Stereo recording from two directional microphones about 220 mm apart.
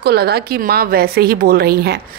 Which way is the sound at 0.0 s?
45° right (ahead or behind).